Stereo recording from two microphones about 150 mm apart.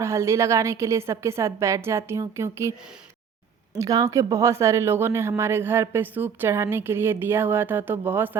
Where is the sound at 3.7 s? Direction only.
20° right (ahead or behind).